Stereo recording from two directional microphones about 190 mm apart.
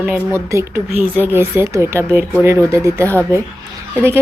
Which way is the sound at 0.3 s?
15° right (ahead or behind).